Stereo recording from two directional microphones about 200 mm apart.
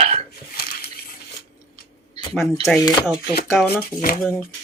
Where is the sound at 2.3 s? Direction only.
Centre (ahead or behind).